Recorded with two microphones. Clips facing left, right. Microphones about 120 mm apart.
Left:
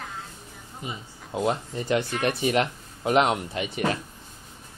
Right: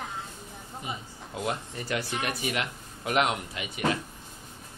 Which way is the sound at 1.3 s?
25° left (ahead or behind).